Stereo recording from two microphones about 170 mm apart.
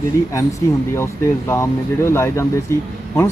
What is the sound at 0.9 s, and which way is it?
Speech, 15° left (ahead or behind).